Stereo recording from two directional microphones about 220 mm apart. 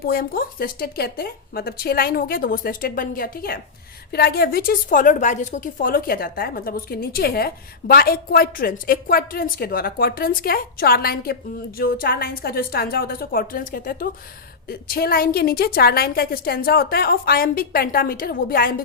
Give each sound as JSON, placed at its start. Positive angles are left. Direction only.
{"t": 0.0, "sound": "a woman's voice", "side_deg": 40}